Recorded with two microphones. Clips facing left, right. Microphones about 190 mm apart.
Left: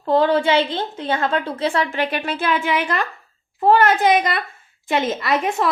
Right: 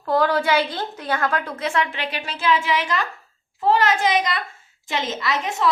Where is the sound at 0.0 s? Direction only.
25° left (ahead or behind).